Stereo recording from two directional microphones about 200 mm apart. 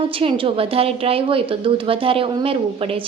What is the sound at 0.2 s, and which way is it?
A woman's voice, 25° right (ahead or behind).